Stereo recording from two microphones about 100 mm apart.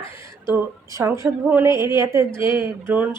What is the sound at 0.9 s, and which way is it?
A woman's voice, 30° right (ahead or behind).